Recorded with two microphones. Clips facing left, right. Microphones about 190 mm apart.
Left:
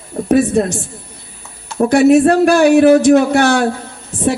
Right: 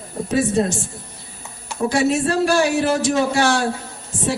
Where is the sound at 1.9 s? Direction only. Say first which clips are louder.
Left 10 dB; 60° left (ahead or behind).